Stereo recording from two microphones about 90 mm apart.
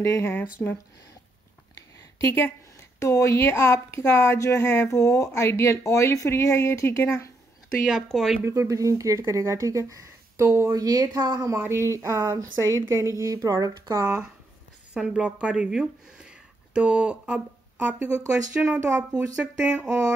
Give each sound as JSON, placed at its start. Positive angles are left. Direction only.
{"t": 0.0, "sound": "speech", "side_deg": 30}
{"t": 0.6, "sound": "speech", "side_deg": 20}
{"t": 2.2, "sound": "speech", "side_deg": 25}
{"t": 8.1, "sound": "speech", "side_deg": 5}
{"t": 8.5, "sound": "speech", "side_deg": -35}
{"t": 10.7, "sound": "speech", "side_deg": -45}
{"t": 11.5, "sound": "speech", "side_deg": -25}
{"t": 15.0, "sound": "speech", "side_deg": -10}
{"t": 18.8, "sound": "speech", "side_deg": -35}
{"t": 19.1, "sound": "speech", "side_deg": -15}